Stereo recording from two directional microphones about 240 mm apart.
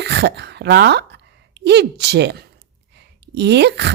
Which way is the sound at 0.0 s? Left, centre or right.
Right.